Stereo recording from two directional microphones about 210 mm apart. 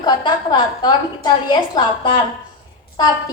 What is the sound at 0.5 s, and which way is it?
A woman's voice, 20° left (ahead or behind).